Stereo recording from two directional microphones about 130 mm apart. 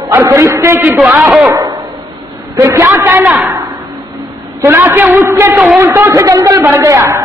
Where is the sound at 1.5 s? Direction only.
30° right (ahead or behind).